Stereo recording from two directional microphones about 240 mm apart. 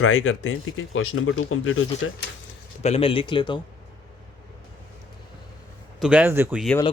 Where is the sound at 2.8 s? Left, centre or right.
Left.